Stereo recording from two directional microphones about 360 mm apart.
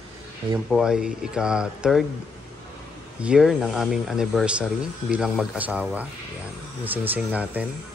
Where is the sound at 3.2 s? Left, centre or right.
Centre.